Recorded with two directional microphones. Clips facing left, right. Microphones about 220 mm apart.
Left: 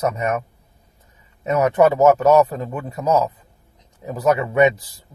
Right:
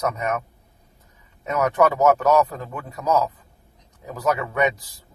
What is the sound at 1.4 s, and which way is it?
Speech, 30° left (ahead or behind).